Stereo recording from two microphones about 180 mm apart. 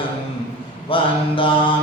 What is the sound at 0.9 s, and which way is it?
Mantra, 30° left (ahead or behind).